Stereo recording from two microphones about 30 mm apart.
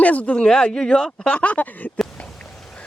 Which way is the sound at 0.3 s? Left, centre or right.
Left.